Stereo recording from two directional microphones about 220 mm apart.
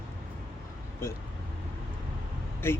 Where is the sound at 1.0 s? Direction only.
10° left (ahead or behind).